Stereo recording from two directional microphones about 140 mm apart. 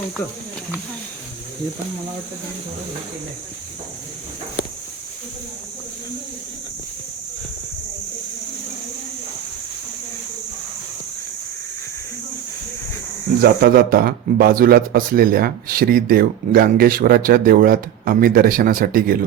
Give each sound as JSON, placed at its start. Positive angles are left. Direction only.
{"t": 13.4, "sound": "speech", "side_deg": -90}